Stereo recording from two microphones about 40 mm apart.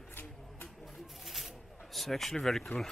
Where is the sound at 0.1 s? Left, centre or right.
Left.